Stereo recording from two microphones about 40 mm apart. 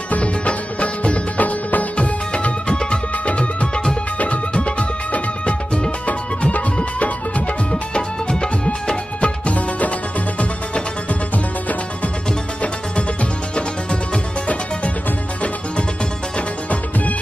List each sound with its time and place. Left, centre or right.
0.1 s music: left
2.0 s music: left
9.2 s music: left
12.9 s music: left